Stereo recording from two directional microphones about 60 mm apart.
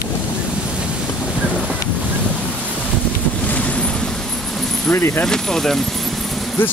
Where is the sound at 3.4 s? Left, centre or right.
Left.